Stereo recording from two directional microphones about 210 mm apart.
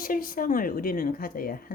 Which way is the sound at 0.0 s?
40° left (ahead or behind).